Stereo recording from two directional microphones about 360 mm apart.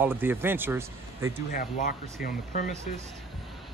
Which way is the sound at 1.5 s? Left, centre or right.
Left.